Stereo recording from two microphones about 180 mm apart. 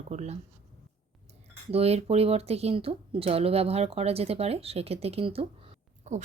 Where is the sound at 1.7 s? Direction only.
35° right (ahead or behind).